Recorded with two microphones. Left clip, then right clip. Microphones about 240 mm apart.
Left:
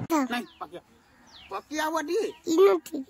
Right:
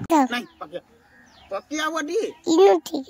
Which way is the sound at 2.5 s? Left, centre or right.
Centre.